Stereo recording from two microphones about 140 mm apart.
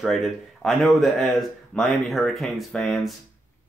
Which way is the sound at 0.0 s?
Centre (ahead or behind).